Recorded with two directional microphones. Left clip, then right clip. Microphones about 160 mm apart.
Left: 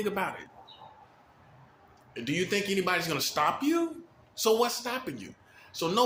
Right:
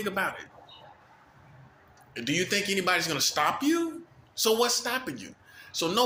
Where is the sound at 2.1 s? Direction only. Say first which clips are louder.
Right 2 dB; 10° left (ahead or behind).